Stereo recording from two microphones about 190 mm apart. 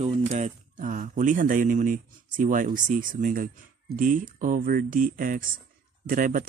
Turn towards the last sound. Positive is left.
turn(degrees=-45)  # may be behind; listen again after turning